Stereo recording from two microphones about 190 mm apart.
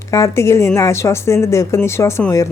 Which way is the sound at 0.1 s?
15° left (ahead or behind).